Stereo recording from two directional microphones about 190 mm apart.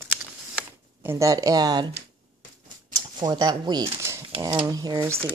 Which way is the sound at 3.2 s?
20° right (ahead or behind).